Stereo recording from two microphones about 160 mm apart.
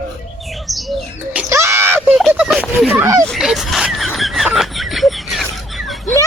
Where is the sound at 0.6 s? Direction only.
Centre (ahead or behind).